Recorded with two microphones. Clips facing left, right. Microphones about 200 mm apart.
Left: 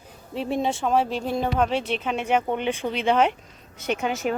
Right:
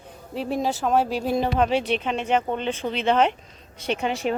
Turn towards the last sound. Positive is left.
turn(degrees=5)  # may be behind; listen again after turning